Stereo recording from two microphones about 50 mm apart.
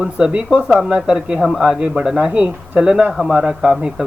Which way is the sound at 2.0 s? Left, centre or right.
Centre.